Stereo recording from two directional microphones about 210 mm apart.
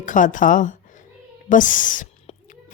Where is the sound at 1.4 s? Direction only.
40° left (ahead or behind).